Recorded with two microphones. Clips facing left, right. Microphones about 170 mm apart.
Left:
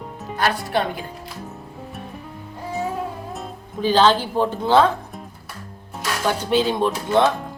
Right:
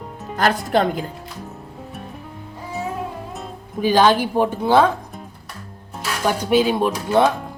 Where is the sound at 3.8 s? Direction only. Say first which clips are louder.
Right 1 dB; 10° right (ahead or behind).